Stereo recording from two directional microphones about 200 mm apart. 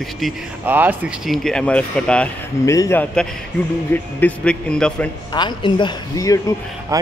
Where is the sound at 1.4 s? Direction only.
5° left (ahead or behind).